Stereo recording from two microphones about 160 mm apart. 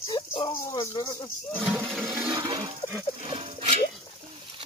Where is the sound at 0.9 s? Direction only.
25° left (ahead or behind).